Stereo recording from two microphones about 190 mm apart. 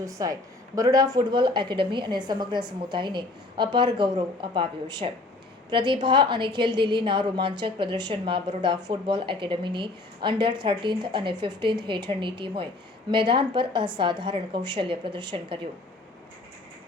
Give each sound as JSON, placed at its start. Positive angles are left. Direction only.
{"t": 0.0, "sound": "a woman's voice", "side_deg": -20}